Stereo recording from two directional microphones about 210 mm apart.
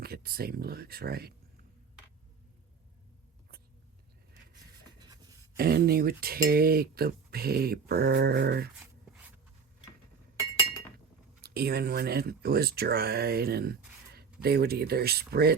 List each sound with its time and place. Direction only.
0.0 s speech: 45° right (ahead or behind)
4.9 s writing: 20° right (ahead or behind)
5.5 s speech: 45° right (ahead or behind)
11.4 s speech: 50° right (ahead or behind)